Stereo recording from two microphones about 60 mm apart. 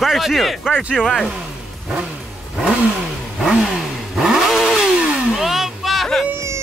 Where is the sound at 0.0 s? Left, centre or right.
Centre.